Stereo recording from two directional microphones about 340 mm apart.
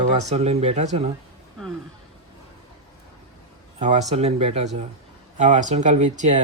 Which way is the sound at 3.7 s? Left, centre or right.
Centre.